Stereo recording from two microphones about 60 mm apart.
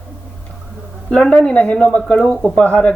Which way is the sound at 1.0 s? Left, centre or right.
Centre.